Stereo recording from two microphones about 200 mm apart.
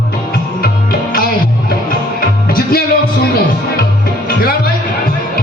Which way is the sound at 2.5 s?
50° left (ahead or behind).